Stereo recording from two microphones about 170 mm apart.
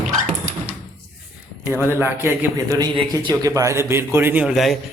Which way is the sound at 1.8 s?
15° right (ahead or behind).